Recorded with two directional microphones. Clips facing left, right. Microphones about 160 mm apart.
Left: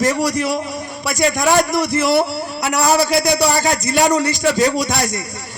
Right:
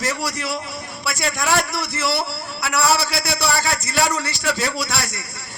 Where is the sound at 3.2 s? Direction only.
15° left (ahead or behind).